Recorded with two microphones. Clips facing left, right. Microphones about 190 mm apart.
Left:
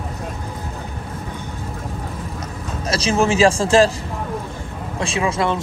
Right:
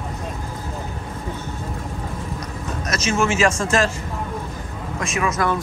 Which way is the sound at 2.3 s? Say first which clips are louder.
Even; 30° left (ahead or behind).